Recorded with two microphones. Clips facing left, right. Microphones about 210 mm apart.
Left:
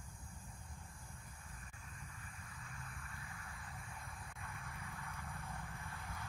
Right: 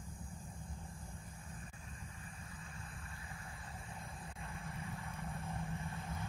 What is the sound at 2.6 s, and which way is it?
Vehicle, 25° right (ahead or behind).